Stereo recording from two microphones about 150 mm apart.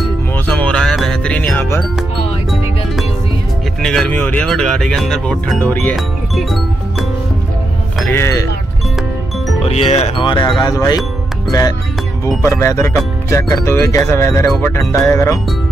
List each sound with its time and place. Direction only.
0.5 s music: 5° left (ahead or behind)
3.8 s speech: 5° left (ahead or behind)
8.1 s speech: 20° left (ahead or behind)
9.6 s speech: 45° left (ahead or behind)
10.2 s speech: 30° left (ahead or behind)
12.4 s speech: 20° left (ahead or behind)